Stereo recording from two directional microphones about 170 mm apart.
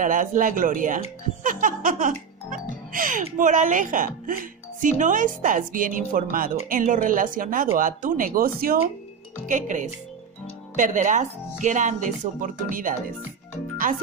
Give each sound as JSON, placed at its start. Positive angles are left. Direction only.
{"t": 0.0, "sound": "speech", "side_deg": -50}
{"t": 1.4, "sound": "music", "side_deg": -50}
{"t": 2.9, "sound": "speech", "side_deg": -50}
{"t": 9.5, "sound": "speech", "side_deg": -45}